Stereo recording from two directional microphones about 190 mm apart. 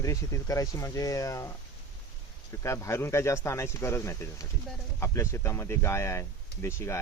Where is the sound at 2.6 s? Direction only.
15° left (ahead or behind).